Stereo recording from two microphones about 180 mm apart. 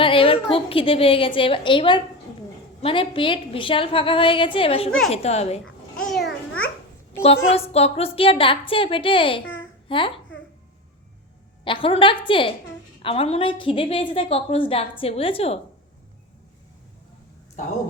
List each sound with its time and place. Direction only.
0.0 s a woman's voice: 30° left (ahead or behind)
4.9 s a woman's voice: centre (ahead or behind)
5.1 s a woman's voice: 35° left (ahead or behind)
5.6 s babbling: centre (ahead or behind)
7.5 s a woman's voice: 35° left (ahead or behind)
9.4 s babbling: 90° left
9.9 s a woman's voice: 30° left (ahead or behind)
11.6 s a woman's voice: 30° left (ahead or behind)
17.6 s a woman's voice: 40° left (ahead or behind)